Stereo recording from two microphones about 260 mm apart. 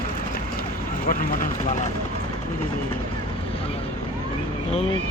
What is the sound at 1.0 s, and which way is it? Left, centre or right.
Speech, left.